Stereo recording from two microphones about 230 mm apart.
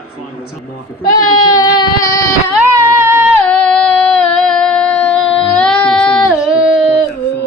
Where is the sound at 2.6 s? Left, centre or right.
Centre.